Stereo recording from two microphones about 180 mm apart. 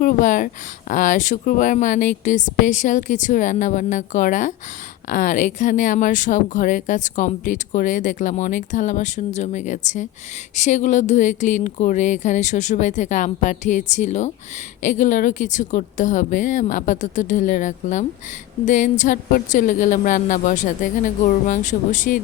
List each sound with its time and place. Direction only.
0.0 s speech: 45° left (ahead or behind)